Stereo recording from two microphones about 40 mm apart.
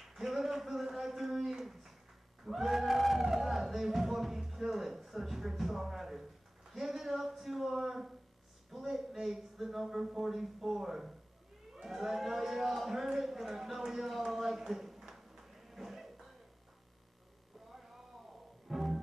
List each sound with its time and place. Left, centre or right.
0.0 s speech: centre
18.7 s music: centre